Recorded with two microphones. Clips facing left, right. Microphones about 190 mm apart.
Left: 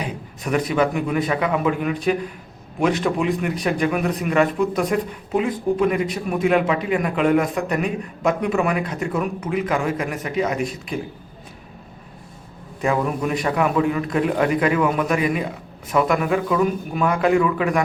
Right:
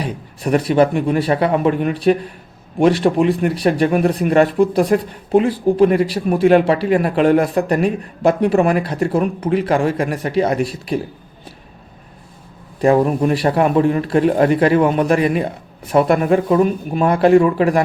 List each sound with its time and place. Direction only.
0.0 s a man's voice: 35° right (ahead or behind)
12.8 s a man's voice: 35° right (ahead or behind)